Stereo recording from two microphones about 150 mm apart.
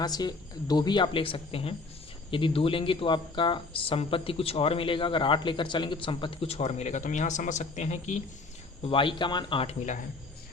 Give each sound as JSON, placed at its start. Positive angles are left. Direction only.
{"t": 0.0, "sound": "speech", "side_deg": 25}
{"t": 8.8, "sound": "speech", "side_deg": 35}